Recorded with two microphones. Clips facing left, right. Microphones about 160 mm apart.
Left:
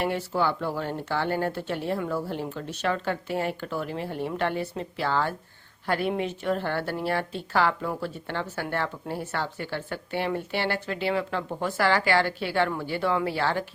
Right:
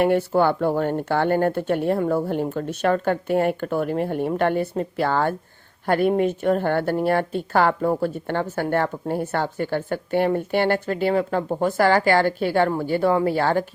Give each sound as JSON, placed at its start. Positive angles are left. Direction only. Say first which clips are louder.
{"t": 0.0, "sound": "a woman's voice", "louder": "right 8 dB", "side_deg": -50}